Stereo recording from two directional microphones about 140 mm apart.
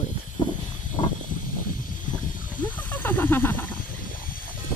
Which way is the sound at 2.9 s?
15° left (ahead or behind).